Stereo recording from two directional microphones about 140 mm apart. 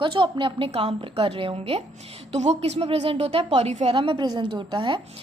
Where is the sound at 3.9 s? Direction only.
35° right (ahead or behind).